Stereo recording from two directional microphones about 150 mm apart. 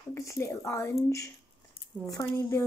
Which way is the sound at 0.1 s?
20° left (ahead or behind).